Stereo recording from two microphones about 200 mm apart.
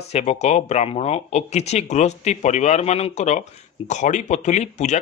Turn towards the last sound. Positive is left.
turn(degrees=35)  # may be behind; listen again after turning